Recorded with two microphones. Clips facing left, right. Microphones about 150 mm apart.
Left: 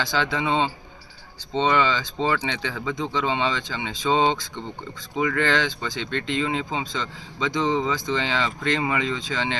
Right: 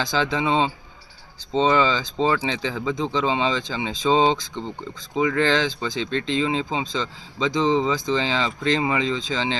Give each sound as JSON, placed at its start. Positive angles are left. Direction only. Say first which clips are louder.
{"t": 0.3, "sound": "speech", "louder": "right 2 dB", "side_deg": -30}